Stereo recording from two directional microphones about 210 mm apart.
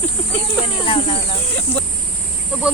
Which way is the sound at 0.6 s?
25° left (ahead or behind).